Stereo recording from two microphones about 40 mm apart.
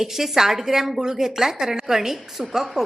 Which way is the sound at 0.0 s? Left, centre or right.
Centre.